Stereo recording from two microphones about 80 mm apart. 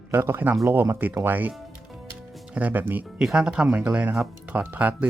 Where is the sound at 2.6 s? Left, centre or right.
Right.